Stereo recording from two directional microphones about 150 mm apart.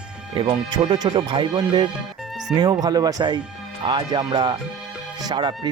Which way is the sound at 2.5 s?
5° right (ahead or behind).